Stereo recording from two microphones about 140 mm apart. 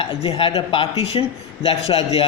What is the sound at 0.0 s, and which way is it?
A man's voice, 40° left (ahead or behind).